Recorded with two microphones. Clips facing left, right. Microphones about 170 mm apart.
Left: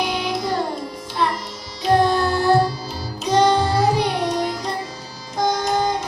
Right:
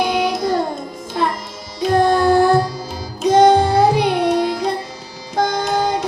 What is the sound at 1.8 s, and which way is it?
Music, 50° right (ahead or behind).